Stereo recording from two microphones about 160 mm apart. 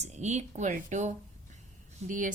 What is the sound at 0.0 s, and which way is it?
A woman's voice, 45° right (ahead or behind).